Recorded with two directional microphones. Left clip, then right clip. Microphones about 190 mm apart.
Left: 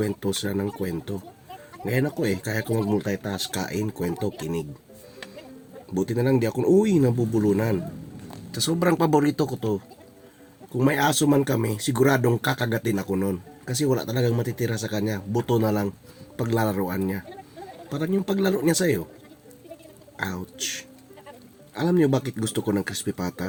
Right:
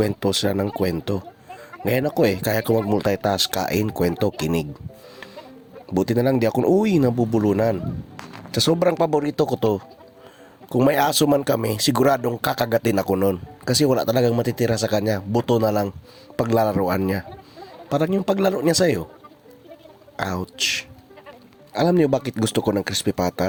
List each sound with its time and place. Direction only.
0.0 s speech: 40° right (ahead or behind)
5.9 s speech: 45° right (ahead or behind)
20.1 s speech: 45° right (ahead or behind)